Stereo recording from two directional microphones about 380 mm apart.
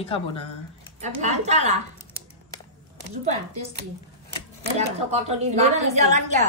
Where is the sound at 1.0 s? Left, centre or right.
Centre.